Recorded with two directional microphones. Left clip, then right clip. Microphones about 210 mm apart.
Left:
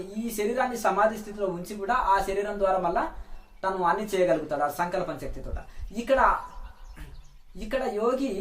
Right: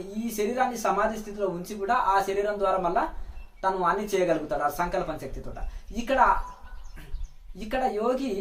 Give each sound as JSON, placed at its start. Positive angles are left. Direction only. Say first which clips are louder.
{"t": 0.1, "sound": "speech", "louder": "even", "side_deg": 0}
{"t": 7.5, "sound": "speech", "louder": "right 2 dB", "side_deg": 0}